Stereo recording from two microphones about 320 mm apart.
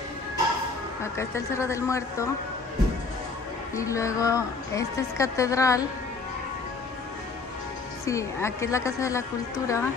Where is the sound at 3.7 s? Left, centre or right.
Centre.